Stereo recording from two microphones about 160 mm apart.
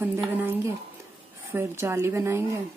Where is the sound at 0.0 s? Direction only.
15° right (ahead or behind).